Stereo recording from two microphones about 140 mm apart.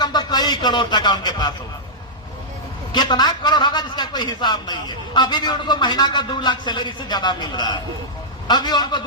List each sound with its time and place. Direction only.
0.0 s speech: 30° left (ahead or behind)
2.9 s a man's voice: 30° left (ahead or behind)